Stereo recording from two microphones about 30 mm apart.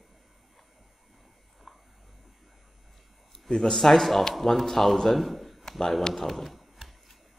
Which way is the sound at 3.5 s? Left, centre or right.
Centre.